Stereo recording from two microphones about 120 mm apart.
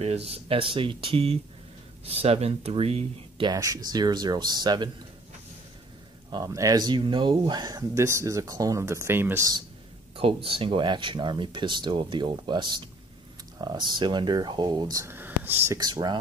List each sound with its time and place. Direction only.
0.0 s speech: 60° right (ahead or behind)
3.4 s speech: 30° right (ahead or behind)
6.3 s speech: 30° right (ahead or behind)
10.1 s speech: 50° right (ahead or behind); by 15.1 s 30° right (ahead or behind)
15.1 s a sound: 15° right (ahead or behind)
15.8 s speech: 40° right (ahead or behind)